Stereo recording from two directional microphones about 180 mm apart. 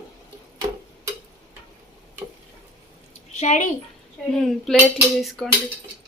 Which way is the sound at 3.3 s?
40° left (ahead or behind).